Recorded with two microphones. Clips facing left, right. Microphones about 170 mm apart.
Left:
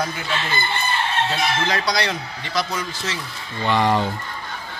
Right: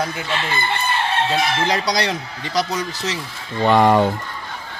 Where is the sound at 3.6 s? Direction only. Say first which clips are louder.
Right 5 dB; 50° right (ahead or behind).